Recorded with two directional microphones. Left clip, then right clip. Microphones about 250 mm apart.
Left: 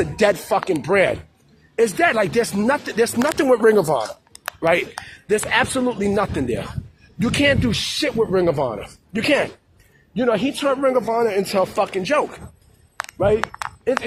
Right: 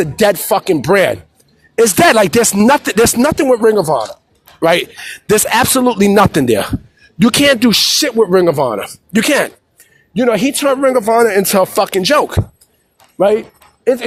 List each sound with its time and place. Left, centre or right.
0.0 s speech: right
3.3 s speech: right
4.6 s speech: right